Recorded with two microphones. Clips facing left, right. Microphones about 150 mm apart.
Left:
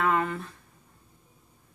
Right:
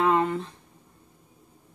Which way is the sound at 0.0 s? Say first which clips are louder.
Right 4 dB; 20° right (ahead or behind).